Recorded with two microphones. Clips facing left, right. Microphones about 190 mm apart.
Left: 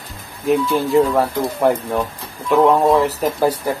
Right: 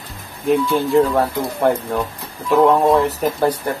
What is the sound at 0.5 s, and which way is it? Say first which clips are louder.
Speech: even; centre (ahead or behind).